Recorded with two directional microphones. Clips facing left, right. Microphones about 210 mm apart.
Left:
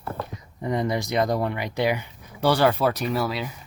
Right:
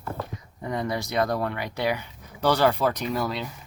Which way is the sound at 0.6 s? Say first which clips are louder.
Left 4 dB; 20° left (ahead or behind).